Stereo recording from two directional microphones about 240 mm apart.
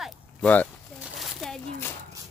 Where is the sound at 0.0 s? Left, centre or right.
Centre.